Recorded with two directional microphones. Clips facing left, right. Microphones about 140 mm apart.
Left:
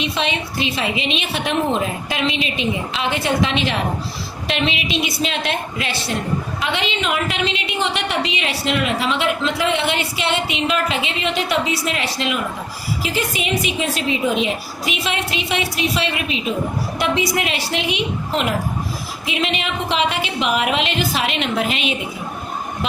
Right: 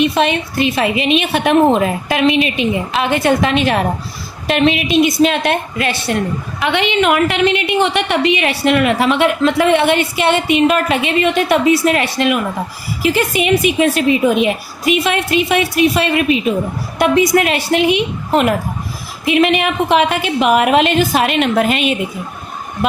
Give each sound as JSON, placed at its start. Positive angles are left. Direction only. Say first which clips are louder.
{"t": 0.0, "sound": "a woman's voice", "louder": "right 8 dB", "side_deg": -55}